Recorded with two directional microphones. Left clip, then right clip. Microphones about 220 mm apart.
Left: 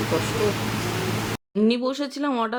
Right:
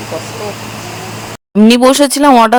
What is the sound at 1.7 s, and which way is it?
Speech, 55° right (ahead or behind).